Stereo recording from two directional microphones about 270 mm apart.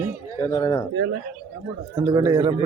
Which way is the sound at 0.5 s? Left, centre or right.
Centre.